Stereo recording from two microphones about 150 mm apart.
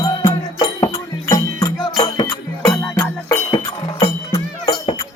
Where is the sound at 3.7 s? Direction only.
30° left (ahead or behind).